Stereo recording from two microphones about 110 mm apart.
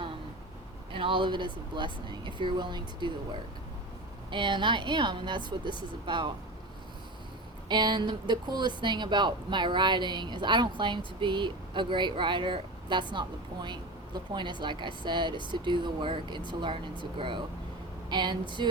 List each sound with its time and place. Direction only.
0.9 s speech: 50° right (ahead or behind)
4.3 s speech: 45° right (ahead or behind)
7.7 s speech: 45° right (ahead or behind)